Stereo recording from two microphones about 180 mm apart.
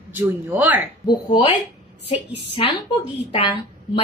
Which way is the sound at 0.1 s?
10° right (ahead or behind).